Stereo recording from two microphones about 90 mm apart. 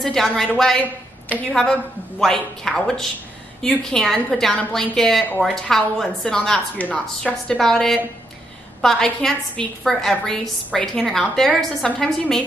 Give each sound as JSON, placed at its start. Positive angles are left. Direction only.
{"t": 0.0, "sound": "a woman's voice", "side_deg": 5}
{"t": 6.8, "sound": "a woman's voice", "side_deg": 15}
{"t": 7.4, "sound": "a woman's voice", "side_deg": 5}